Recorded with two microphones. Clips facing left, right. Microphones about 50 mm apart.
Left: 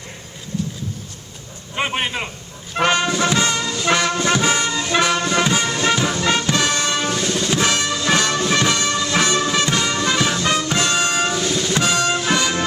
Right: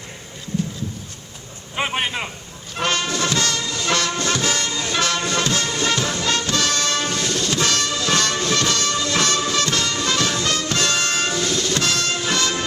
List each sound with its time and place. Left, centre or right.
1.7 s a man's voice: centre
2.7 s music: centre